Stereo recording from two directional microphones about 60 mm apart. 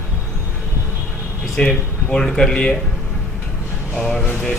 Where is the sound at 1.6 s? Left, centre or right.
Centre.